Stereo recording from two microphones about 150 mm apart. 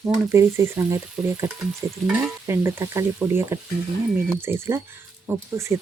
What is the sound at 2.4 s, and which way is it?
Speech, 20° right (ahead or behind).